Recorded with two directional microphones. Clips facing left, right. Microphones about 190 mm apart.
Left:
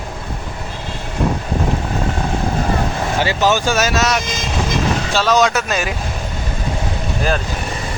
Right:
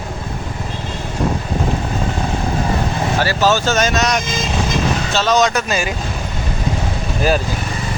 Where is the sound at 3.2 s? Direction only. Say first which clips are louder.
Even; 15° left (ahead or behind).